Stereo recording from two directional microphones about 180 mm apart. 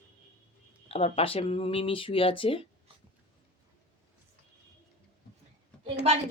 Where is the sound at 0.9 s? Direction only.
35° left (ahead or behind).